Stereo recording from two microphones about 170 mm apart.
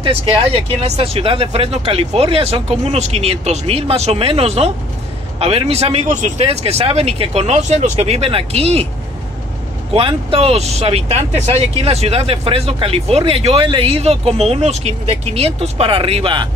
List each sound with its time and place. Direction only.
0.0 s speech: 35° right (ahead or behind)
9.9 s speech: 35° right (ahead or behind)